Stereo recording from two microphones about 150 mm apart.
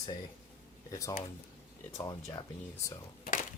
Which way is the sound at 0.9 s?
20° left (ahead or behind).